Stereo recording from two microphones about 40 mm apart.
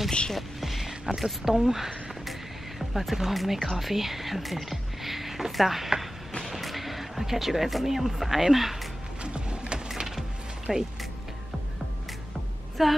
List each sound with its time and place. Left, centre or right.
0.3 s music: centre
1.1 s speech: centre
9.2 s music: right
9.9 s music: centre
10.7 s speech: centre
12.8 s speech: centre